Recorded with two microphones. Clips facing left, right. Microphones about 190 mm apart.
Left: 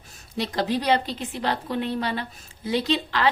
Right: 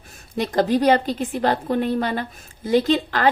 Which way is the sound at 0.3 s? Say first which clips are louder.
Right 6 dB; 50° right (ahead or behind).